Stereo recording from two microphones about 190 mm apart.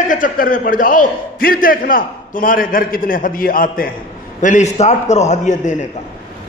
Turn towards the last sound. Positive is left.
turn(degrees=40)  # may be behind; listen again after turning